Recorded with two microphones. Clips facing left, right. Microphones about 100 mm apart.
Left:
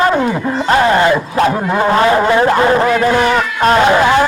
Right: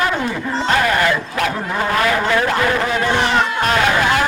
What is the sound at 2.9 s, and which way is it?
Speech, 40° left (ahead or behind).